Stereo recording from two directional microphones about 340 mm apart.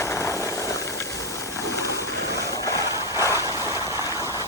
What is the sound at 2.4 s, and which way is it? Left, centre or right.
Vehicle, centre.